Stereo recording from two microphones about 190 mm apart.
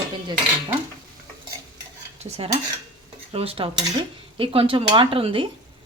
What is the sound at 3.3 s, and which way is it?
A woman's voice, 30° right (ahead or behind).